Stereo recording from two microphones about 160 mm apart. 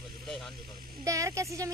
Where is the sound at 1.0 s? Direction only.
20° right (ahead or behind).